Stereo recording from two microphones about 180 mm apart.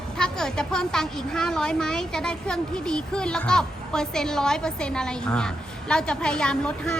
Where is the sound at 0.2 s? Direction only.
5° left (ahead or behind).